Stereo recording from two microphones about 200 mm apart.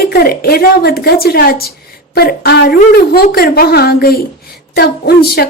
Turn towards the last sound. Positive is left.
turn(degrees=50)  # may be behind; listen again after turning